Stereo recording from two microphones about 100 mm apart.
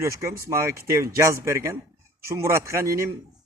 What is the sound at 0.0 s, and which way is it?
A man's voice, 30° right (ahead or behind).